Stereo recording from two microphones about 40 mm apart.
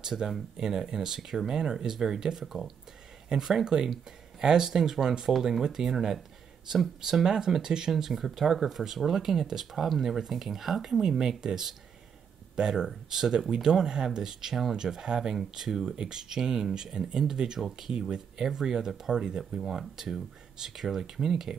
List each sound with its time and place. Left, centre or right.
0.0 s speech: centre
17.6 s speech: centre
17.9 s speech: centre